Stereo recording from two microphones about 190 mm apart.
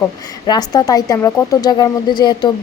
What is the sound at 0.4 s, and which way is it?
A woman's voice, 20° left (ahead or behind).